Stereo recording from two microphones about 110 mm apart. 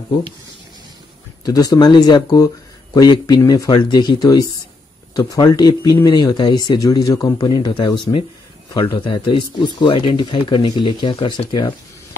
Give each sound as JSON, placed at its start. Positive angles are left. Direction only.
{"t": 1.4, "sound": "speech", "side_deg": 35}